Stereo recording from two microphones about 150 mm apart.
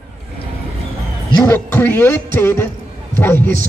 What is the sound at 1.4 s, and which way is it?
A woman's voice, 15° left (ahead or behind).